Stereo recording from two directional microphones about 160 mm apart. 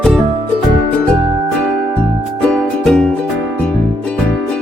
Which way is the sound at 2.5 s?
5° left (ahead or behind).